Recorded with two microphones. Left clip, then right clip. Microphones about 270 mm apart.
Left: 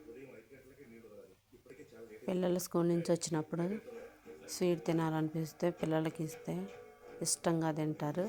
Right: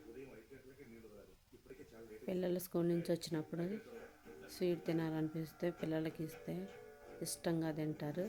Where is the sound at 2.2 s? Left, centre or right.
Centre.